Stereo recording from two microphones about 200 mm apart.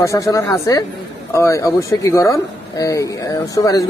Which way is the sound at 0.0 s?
15° left (ahead or behind).